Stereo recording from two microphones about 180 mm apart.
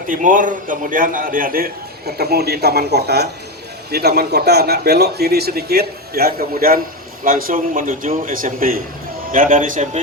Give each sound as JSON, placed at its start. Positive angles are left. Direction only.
{"t": 0.1, "sound": "a man's voice", "side_deg": -50}